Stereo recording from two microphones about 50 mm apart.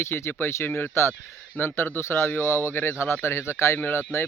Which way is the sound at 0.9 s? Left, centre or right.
Left.